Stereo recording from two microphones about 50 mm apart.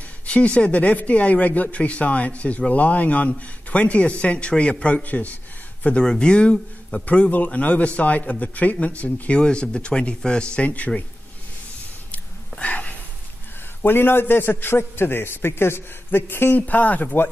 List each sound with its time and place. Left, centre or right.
0.3 s speech: left
6.0 s speech: centre
7.1 s speech: left
12.1 s a sound: left
13.8 s a man's voice: left
16.5 s speech: left